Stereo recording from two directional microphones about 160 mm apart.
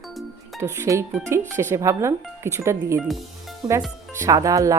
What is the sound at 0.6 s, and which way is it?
Speech, 15° right (ahead or behind).